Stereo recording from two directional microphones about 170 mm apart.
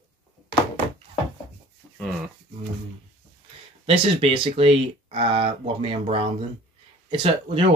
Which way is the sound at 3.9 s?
30° right (ahead or behind).